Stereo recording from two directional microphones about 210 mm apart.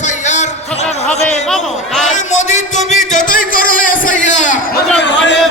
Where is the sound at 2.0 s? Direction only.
35° left (ahead or behind).